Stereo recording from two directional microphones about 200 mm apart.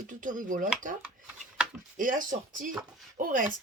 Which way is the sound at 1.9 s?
40° right (ahead or behind).